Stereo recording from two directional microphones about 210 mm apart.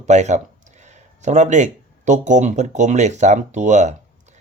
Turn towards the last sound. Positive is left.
turn(degrees=-35)  # may be behind; listen again after turning